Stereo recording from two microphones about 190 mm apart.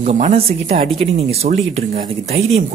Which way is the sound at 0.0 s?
35° right (ahead or behind).